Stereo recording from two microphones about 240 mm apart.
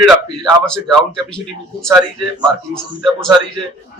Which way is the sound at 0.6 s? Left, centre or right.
Centre.